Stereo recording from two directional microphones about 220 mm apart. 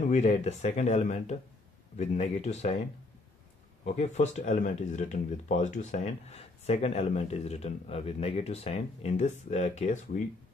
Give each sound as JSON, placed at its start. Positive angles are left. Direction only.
{"t": 0.1, "sound": "speech", "side_deg": 30}
{"t": 3.8, "sound": "speech", "side_deg": 30}